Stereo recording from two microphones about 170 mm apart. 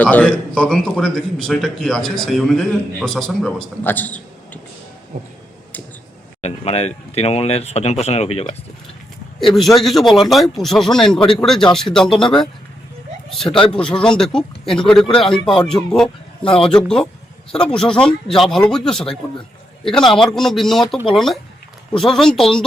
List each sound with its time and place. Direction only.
0.0 s a man's voice: 10° left (ahead or behind)
6.4 s speech: 40° left (ahead or behind)
9.4 s a man's voice: centre (ahead or behind)
13.7 s a man's voice: 5° left (ahead or behind)
20.2 s a man's voice: centre (ahead or behind)
21.9 s a man's voice: 5° left (ahead or behind)